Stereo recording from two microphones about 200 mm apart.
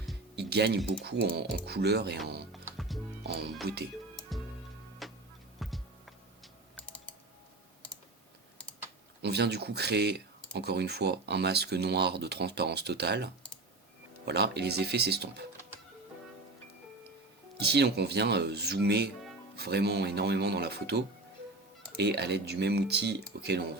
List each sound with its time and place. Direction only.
0.3 s music: 55° right (ahead or behind)
1.0 s speech: 55° right (ahead or behind)
2.7 s music: centre (ahead or behind)
3.6 s speech: 55° right (ahead or behind)
4.1 s music: 5° left (ahead or behind)
9.2 s speech: 55° right (ahead or behind)
17.6 s speech: 55° right (ahead or behind)